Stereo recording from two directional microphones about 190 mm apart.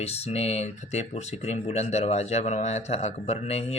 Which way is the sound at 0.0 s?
35° left (ahead or behind).